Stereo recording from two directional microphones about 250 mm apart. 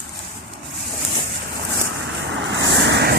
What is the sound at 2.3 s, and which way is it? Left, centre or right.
Vehicle, right.